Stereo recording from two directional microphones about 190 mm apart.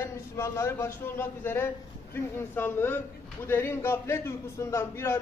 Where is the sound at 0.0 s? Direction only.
15° left (ahead or behind).